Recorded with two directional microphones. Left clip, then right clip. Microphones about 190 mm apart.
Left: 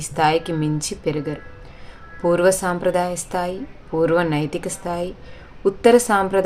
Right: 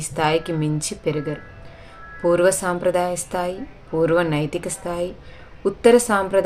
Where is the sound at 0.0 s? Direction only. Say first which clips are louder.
Left 2 dB; 10° left (ahead or behind).